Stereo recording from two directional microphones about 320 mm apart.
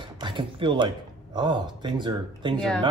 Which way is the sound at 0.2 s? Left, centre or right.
Centre.